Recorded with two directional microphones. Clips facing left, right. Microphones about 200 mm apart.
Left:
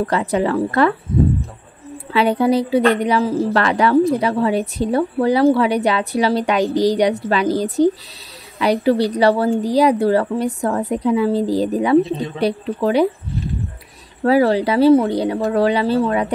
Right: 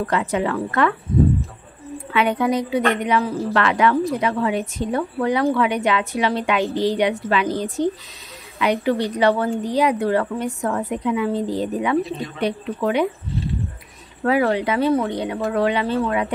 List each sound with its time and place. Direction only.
0.0 s a woman's voice: 35° left (ahead or behind)
2.1 s a woman's voice: 30° left (ahead or behind)
14.2 s a woman's voice: 35° left (ahead or behind)